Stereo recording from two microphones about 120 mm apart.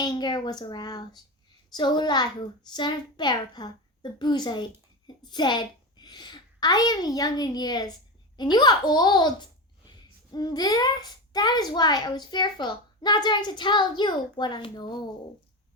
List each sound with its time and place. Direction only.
0.0 s a child's voice: 35° left (ahead or behind)